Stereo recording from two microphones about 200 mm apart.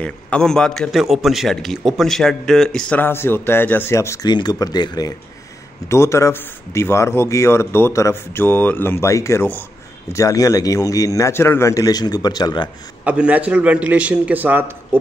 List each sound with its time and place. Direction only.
0.0 s a man's voice: 5° left (ahead or behind); by 12.6 s 20° left (ahead or behind)
13.0 s a man's voice: 5° right (ahead or behind)